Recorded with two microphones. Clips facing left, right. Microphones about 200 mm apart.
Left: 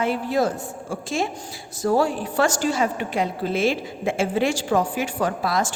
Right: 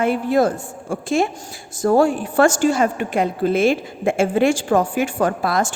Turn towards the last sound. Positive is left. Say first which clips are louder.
# right 3 dB
turn(degrees=-55)  # may be behind; listen again after turning